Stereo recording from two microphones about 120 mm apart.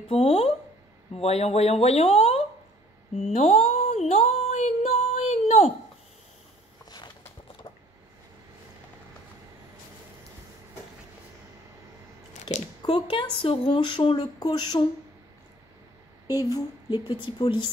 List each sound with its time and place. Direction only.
0.1 s speech: 55° left (ahead or behind)
3.2 s a sound: 65° left (ahead or behind)
12.8 s speech: 45° left (ahead or behind)
16.3 s a woman's voice: 30° left (ahead or behind)